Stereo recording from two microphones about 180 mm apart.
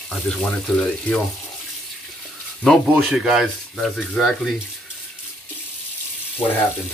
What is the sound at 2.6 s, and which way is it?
Speech, centre (ahead or behind).